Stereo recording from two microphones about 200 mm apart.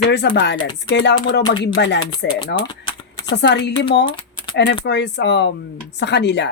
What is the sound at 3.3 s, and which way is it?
Speech, 60° left (ahead or behind).